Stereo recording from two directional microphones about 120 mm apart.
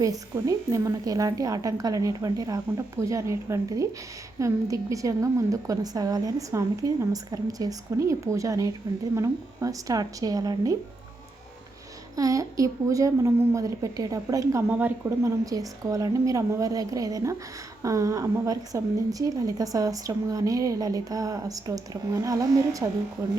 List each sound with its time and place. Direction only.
0.0 s a woman's voice: 30° right (ahead or behind)
12.1 s a woman's voice: 30° right (ahead or behind)
14.7 s a woman's voice: 15° right (ahead or behind)
15.4 s a woman's voice: 30° right (ahead or behind)